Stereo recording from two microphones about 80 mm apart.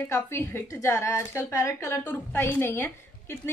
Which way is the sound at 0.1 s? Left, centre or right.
Left.